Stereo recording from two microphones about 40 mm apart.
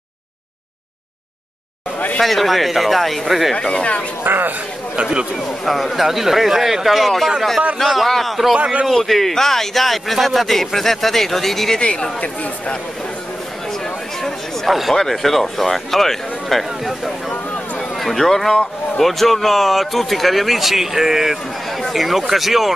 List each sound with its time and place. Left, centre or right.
2.2 s speech: centre
3.6 s speech: left
4.2 s speech: right
5.4 s speech: centre
11.8 s speech: left
14.7 s speech: centre
17.9 s speech: centre